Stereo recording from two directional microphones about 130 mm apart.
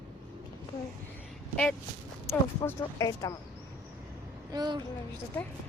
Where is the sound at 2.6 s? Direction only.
25° left (ahead or behind).